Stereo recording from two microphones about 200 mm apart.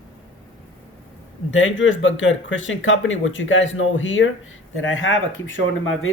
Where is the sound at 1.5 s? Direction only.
70° left (ahead or behind).